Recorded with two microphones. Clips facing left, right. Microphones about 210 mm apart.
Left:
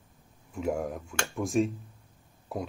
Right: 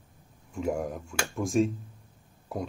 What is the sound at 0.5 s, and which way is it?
Speech, centre (ahead or behind).